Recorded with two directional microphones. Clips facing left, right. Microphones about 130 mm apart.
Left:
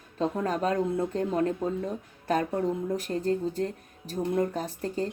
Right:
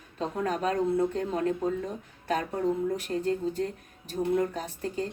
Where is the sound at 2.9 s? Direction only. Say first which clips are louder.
Left 1 dB; 40° left (ahead or behind).